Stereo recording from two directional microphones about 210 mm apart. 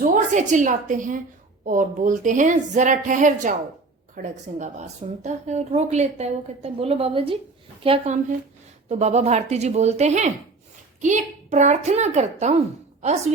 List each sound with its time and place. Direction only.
0.0 s a woman's voice: 35° right (ahead or behind)
11.5 s a woman's voice: 35° right (ahead or behind)